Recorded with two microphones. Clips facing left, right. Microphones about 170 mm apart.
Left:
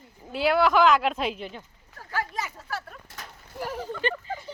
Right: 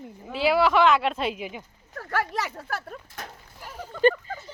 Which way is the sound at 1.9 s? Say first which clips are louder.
Right 4 dB; 70° right (ahead or behind).